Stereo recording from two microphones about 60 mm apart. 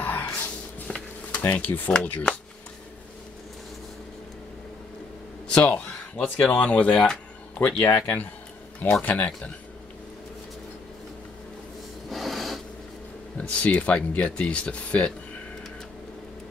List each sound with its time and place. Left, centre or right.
0.0 s music: left
0.8 s a sound: centre
1.4 s speech: left
5.5 s speech: left
12.1 s a sound: centre
13.4 s speech: left